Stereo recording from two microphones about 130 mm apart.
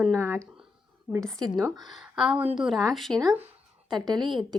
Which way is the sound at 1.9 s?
5° right (ahead or behind).